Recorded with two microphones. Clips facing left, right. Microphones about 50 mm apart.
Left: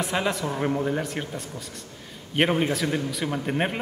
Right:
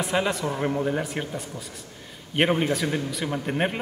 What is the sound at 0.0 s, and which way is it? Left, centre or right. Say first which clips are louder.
Speech: right 1 dB; centre.